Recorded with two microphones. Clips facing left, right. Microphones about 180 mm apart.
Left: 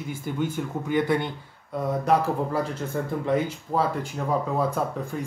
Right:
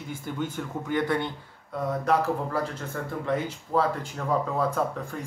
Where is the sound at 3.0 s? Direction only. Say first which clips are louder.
Left 4 dB; 15° left (ahead or behind).